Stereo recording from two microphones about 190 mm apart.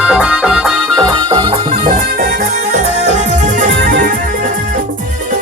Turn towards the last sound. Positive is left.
turn(degrees=-45)  # may be behind; listen again after turning